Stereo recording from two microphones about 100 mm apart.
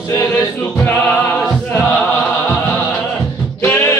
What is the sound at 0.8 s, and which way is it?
Music, 15° left (ahead or behind).